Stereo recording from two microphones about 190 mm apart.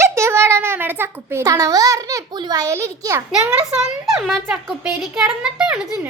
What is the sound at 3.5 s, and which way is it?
A child's voice, 5° right (ahead or behind).